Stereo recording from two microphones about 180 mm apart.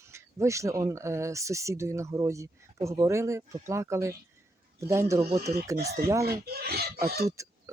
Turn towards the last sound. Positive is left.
turn(degrees=-15)  # may be behind; listen again after turning